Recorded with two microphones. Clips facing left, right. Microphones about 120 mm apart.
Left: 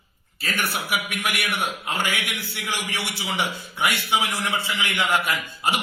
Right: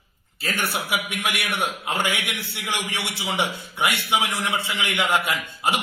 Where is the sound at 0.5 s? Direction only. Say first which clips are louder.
Even; 20° right (ahead or behind).